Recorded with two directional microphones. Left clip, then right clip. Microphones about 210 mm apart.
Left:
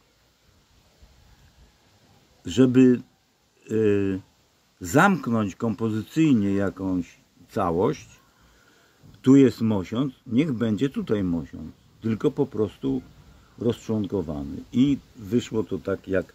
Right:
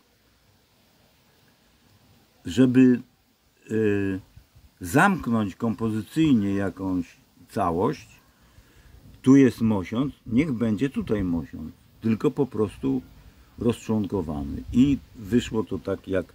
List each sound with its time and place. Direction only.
2.4 s speech: centre (ahead or behind)
9.2 s speech: 5° right (ahead or behind)
12.0 s speech: 20° right (ahead or behind); by 16.3 s centre (ahead or behind)